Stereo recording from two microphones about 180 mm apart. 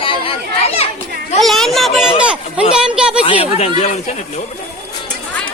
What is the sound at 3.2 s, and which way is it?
Speech, 30° left (ahead or behind).